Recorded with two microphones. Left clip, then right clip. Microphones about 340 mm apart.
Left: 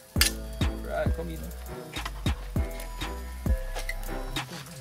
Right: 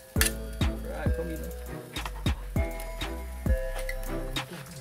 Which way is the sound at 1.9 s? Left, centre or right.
Centre.